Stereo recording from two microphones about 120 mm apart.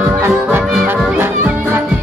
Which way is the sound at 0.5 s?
15° right (ahead or behind).